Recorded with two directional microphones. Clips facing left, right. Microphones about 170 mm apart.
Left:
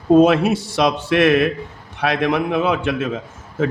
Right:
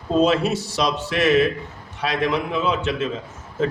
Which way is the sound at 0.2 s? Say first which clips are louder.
Left 5 dB; 55° left (ahead or behind).